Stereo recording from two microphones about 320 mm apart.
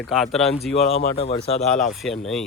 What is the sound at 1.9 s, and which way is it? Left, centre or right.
Speech, centre.